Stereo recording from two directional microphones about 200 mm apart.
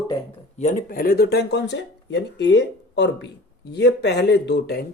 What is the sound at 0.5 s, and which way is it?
Speech, 40° left (ahead or behind).